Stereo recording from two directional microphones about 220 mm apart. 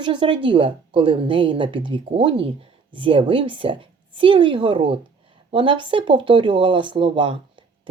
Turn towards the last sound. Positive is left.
turn(degrees=-20)  # may be behind; listen again after turning